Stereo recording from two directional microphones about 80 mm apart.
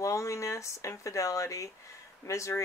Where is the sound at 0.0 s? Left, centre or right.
Left.